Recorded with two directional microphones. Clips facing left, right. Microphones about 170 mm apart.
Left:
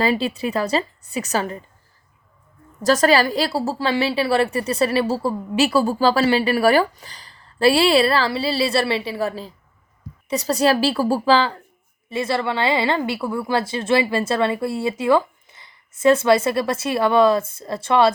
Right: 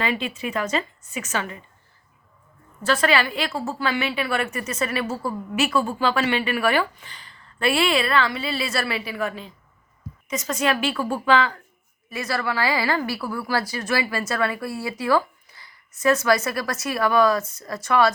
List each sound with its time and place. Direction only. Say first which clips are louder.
0.0 s a woman's voice: left 6 dB; 35° left (ahead or behind)
2.8 s a woman's voice: left 5 dB; 40° left (ahead or behind)